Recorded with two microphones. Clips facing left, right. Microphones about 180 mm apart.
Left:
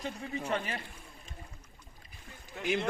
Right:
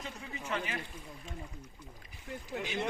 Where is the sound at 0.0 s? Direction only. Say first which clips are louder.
Left 6 dB; 35° left (ahead or behind).